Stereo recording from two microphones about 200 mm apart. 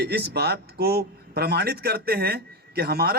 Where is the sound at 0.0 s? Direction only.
55° right (ahead or behind).